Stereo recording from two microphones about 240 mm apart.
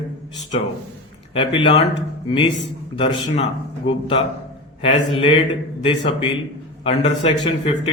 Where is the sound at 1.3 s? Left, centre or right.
Left.